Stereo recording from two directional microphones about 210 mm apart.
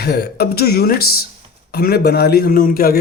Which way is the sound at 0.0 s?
50° left (ahead or behind).